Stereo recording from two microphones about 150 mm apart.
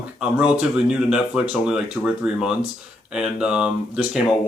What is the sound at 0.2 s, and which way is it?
Speech, 5° right (ahead or behind).